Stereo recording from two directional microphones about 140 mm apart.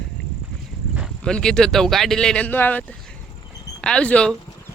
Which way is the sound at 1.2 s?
5° left (ahead or behind).